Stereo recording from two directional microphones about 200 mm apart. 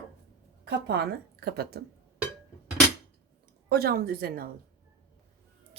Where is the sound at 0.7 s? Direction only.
55° right (ahead or behind).